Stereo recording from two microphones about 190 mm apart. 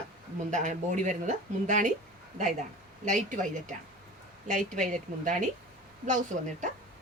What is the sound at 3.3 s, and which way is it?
A woman's voice, 45° right (ahead or behind).